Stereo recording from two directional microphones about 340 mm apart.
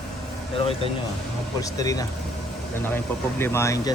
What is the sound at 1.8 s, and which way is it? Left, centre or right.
Speech, centre.